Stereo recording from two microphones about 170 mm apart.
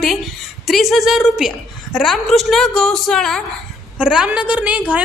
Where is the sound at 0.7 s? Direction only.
Centre (ahead or behind).